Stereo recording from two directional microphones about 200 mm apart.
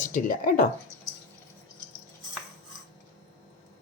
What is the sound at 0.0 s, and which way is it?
Speech, 40° left (ahead or behind).